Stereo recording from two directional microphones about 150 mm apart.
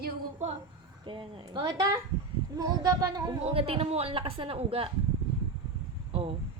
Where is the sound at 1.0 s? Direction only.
30° right (ahead or behind).